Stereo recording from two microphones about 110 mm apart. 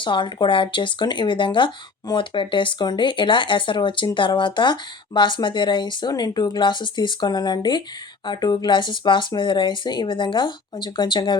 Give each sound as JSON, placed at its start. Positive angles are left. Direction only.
{"t": 0.0, "sound": "speech", "side_deg": 45}